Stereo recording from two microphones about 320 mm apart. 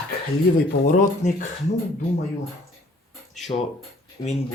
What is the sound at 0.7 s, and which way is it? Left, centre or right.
Speech, left.